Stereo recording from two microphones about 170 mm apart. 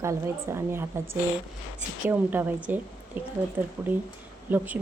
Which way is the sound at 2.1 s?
10° right (ahead or behind).